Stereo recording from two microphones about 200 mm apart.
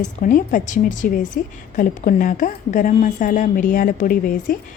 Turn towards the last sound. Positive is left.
turn(degrees=45)  # may be behind; listen again after turning